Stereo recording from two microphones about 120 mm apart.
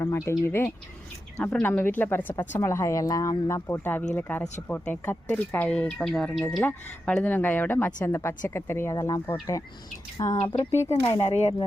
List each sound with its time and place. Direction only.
0.0 s speech: 20° left (ahead or behind)
10.2 s speech: 40° left (ahead or behind)
11.2 s speech: 65° left (ahead or behind)